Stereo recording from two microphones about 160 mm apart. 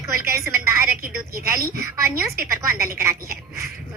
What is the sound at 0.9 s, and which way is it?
Speech, 65° right (ahead or behind).